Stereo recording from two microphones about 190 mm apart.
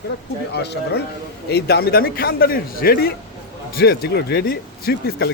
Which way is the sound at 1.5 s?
55° left (ahead or behind).